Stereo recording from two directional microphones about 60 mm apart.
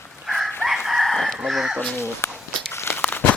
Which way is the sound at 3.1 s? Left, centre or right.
Left.